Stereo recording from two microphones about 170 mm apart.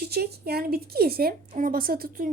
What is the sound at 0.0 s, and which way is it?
A woman's voice, 70° right (ahead or behind).